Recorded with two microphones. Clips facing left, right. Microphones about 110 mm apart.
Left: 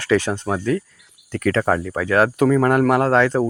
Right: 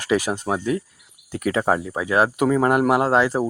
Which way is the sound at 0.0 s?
15° right (ahead or behind).